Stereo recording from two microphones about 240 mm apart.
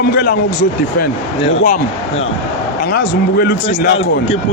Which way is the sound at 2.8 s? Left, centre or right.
Left.